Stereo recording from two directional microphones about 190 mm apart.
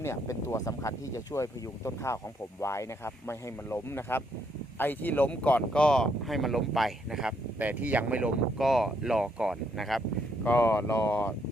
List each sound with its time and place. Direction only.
0.0 s speech: 15° left (ahead or behind)
10.4 s speech: 10° left (ahead or behind)